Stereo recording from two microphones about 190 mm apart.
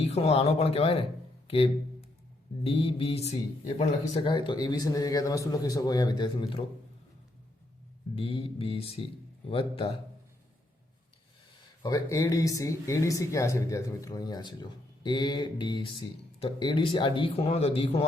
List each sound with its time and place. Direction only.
0.0 s speech: 30° left (ahead or behind)
8.2 s speech: 30° left (ahead or behind)
11.8 s speech: 20° left (ahead or behind)